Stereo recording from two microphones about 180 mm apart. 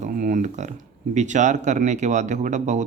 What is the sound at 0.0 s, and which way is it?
Speech, 50° right (ahead or behind).